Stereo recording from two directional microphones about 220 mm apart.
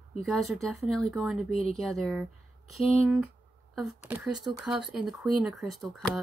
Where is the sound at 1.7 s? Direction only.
Centre (ahead or behind).